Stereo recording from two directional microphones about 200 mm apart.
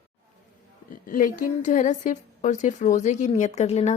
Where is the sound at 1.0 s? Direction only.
45° left (ahead or behind).